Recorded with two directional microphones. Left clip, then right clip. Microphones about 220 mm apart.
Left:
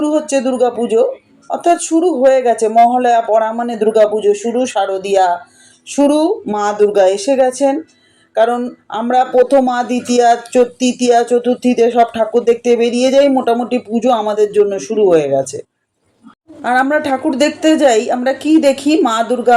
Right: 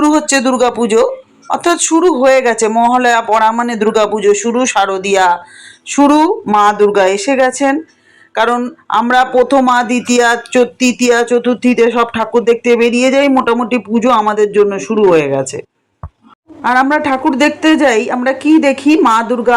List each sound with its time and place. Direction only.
0.0 s speech: 20° right (ahead or behind)
16.6 s speech: 15° right (ahead or behind)